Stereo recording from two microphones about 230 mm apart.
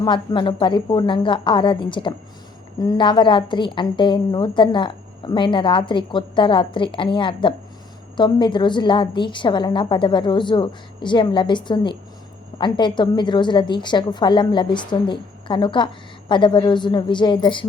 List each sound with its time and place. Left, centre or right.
0.0 s a woman's voice: centre